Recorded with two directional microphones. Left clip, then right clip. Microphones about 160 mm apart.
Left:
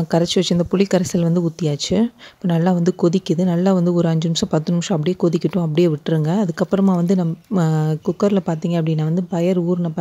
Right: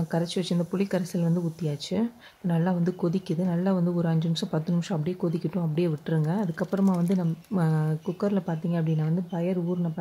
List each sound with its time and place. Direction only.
0.1 s speech: 45° left (ahead or behind)